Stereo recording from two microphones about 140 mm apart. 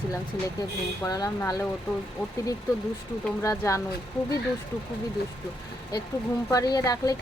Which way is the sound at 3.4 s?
20° left (ahead or behind).